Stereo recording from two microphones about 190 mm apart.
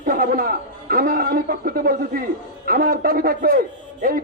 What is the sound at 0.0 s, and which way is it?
Speech, 50° right (ahead or behind).